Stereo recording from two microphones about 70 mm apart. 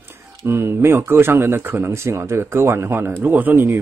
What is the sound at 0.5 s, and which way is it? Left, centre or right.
Speech, right.